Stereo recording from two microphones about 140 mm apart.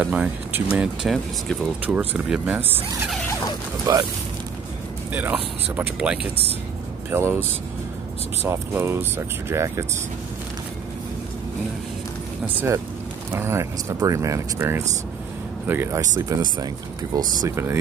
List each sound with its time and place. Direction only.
0.0 s speech: 10° right (ahead or behind)
0.7 s speech: centre (ahead or behind)
3.9 s speech: 25° right (ahead or behind)
5.1 s speech: 10° right (ahead or behind)
8.5 s speech: 15° right (ahead or behind)
13.3 s speech: 20° right (ahead or behind)